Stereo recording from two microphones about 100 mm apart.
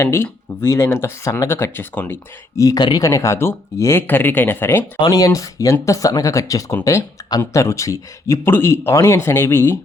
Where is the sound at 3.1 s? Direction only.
30° left (ahead or behind).